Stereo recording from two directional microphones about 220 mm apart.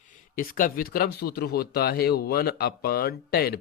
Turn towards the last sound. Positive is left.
turn(degrees=45)  # may be behind; listen again after turning